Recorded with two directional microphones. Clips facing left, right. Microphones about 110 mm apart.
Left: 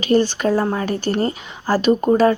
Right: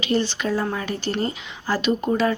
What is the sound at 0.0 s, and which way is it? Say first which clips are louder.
Speech: left 6 dB; 45° left (ahead or behind).